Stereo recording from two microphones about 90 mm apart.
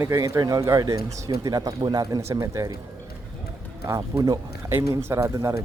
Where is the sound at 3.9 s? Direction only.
35° right (ahead or behind).